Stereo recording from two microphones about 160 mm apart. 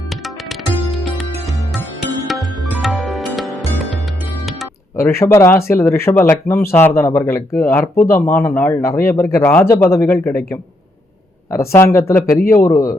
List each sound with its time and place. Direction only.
2.2 s music: centre (ahead or behind)
4.9 s speech: 15° left (ahead or behind)
11.5 s a man's voice: 15° left (ahead or behind)